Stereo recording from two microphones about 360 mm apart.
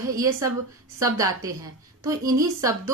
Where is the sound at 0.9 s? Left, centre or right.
Centre.